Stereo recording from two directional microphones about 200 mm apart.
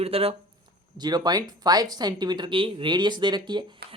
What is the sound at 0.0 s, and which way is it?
Speech, 30° right (ahead or behind).